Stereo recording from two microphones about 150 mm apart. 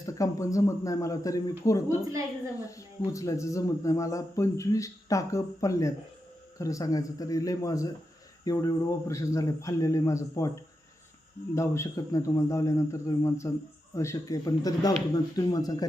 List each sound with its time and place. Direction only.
0.0 s speech: 20° left (ahead or behind)